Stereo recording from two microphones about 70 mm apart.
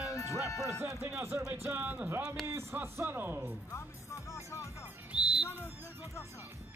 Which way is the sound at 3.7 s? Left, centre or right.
Left.